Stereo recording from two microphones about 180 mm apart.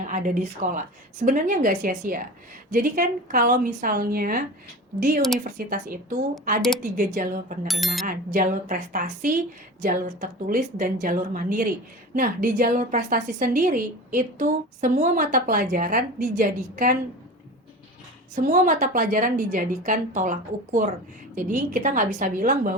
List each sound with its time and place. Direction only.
0.1 s a woman's voice: 45° right (ahead or behind)
7.7 s speech: centre (ahead or behind)
8.0 s a woman's voice: 50° right (ahead or behind)
18.4 s a woman's voice: 50° right (ahead or behind)